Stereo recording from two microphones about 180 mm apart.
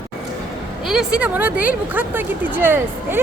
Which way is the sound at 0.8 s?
Centre (ahead or behind).